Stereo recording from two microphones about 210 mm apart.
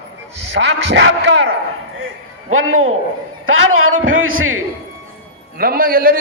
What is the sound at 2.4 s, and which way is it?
A man's voice, 75° right (ahead or behind).